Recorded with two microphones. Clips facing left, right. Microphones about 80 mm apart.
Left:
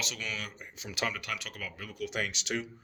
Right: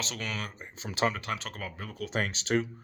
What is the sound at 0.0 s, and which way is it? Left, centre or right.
Speech, right.